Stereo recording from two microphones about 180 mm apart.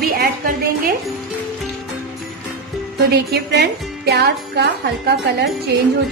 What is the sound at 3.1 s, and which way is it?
Speech, 65° right (ahead or behind).